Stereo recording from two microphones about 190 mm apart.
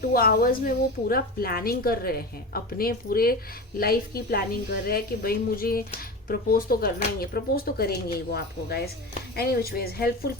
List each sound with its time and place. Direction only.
0.1 s a woman's voice: 50° left (ahead or behind)